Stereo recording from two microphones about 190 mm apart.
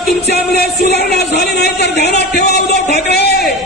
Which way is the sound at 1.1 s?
60° left (ahead or behind).